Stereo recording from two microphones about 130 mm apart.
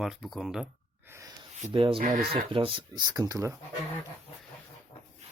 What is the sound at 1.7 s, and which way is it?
Speech, 40° right (ahead or behind).